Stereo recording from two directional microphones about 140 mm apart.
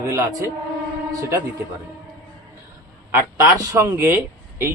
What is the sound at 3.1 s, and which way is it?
A man's voice, 20° right (ahead or behind).